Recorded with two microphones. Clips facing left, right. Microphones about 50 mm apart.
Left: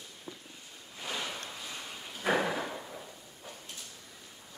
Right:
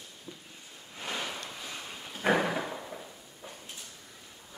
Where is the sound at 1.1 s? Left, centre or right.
Centre.